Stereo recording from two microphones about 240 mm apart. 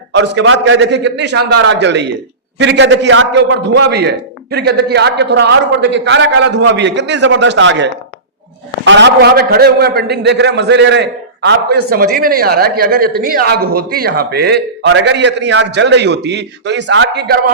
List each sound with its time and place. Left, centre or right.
0.1 s a man's voice: right